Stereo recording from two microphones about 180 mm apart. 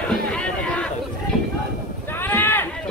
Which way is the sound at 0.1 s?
5° left (ahead or behind).